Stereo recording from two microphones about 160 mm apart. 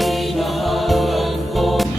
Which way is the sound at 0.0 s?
Centre (ahead or behind).